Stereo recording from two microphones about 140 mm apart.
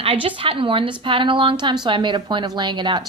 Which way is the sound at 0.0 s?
40° right (ahead or behind).